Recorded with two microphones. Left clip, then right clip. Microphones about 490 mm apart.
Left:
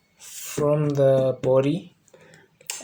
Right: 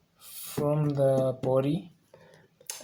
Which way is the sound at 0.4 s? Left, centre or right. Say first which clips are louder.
Left 7 dB; right.